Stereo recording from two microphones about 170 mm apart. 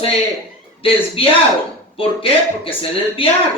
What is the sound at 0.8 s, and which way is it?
A man's voice, 35° left (ahead or behind).